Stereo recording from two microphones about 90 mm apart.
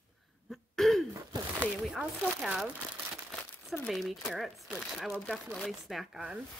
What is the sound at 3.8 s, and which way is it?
Speech, centre (ahead or behind).